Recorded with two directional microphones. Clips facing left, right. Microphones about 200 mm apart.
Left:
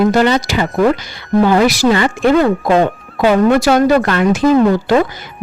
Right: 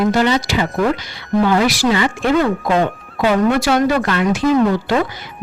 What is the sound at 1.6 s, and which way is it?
Speech, 50° left (ahead or behind).